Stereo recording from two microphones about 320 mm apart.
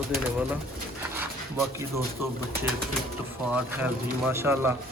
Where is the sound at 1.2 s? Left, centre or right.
Centre.